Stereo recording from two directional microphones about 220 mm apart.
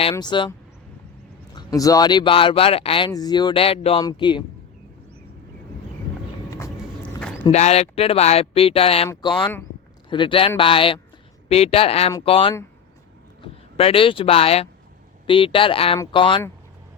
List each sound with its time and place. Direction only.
0.0 s speech: 20° left (ahead or behind)
1.5 s speech: 15° left (ahead or behind)
6.5 s vehicle: 10° left (ahead or behind)
7.5 s speech: 30° left (ahead or behind)
10.1 s speech: 20° left (ahead or behind)